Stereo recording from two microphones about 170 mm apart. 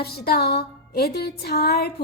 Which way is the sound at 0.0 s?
70° left (ahead or behind).